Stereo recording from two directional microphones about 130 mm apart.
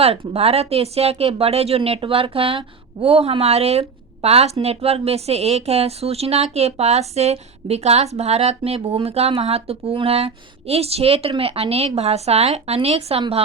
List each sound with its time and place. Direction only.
0.0 s speech: 50° right (ahead or behind)